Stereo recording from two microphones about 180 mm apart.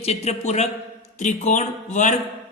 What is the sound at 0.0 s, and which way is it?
A man's voice, 35° left (ahead or behind).